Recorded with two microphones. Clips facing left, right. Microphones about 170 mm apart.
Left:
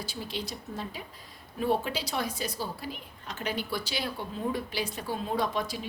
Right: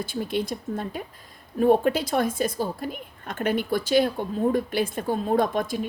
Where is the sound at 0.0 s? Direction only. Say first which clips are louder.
Right 9 dB; 50° right (ahead or behind).